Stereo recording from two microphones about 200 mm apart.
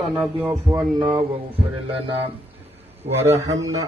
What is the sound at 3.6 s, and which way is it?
Speech, 15° right (ahead or behind).